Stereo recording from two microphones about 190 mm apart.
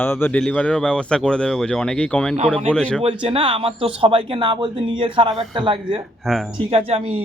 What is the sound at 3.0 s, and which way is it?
Speech, 30° right (ahead or behind).